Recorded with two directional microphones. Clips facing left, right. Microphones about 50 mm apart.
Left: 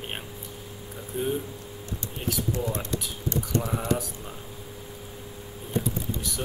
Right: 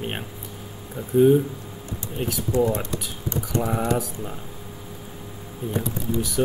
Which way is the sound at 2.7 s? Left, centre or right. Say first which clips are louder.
Right 4 dB; centre.